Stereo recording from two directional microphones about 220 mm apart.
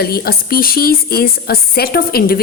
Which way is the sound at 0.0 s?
45° left (ahead or behind).